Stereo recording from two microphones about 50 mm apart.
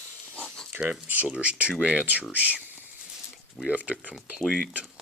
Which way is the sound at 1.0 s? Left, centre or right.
Right.